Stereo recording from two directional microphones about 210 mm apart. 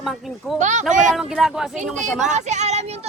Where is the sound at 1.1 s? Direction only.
Centre (ahead or behind).